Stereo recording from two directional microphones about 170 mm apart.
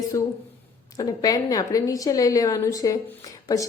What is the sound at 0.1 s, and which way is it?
A woman's voice, 20° left (ahead or behind).